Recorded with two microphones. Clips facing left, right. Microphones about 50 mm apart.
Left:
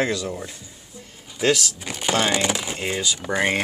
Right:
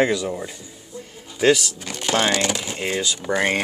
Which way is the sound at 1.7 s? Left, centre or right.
Centre.